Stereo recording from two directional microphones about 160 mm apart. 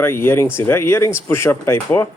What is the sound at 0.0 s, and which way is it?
Speech, 15° left (ahead or behind).